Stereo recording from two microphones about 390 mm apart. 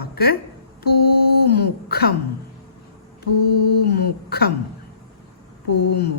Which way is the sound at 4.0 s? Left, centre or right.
Left.